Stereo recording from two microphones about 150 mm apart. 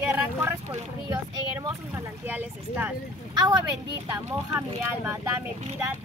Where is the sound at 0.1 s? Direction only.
15° right (ahead or behind).